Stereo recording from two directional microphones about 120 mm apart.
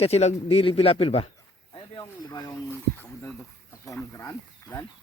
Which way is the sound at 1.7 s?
35° left (ahead or behind).